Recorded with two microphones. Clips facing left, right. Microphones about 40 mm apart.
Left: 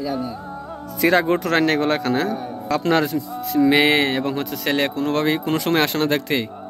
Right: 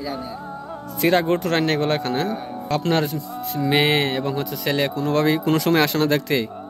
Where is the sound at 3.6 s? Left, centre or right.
Left.